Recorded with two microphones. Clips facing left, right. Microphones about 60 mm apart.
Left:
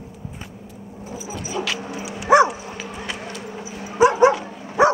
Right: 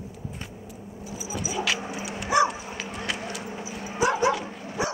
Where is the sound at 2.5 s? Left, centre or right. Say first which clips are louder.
Left 2 dB; centre.